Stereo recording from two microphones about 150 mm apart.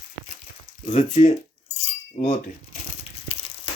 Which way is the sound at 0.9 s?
55° left (ahead or behind).